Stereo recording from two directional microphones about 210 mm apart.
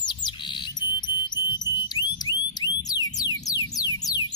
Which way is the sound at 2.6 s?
20° left (ahead or behind).